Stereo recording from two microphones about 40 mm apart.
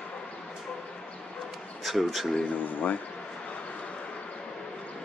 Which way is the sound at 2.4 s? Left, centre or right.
Left.